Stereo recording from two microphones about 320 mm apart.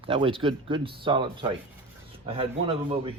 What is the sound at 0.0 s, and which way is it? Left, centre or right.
Speech, centre.